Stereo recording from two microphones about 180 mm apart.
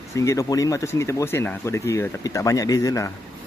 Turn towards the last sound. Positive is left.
turn(degrees=20)  # may be behind; listen again after turning